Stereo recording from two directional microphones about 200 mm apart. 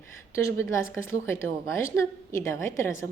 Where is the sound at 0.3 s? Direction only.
15° left (ahead or behind).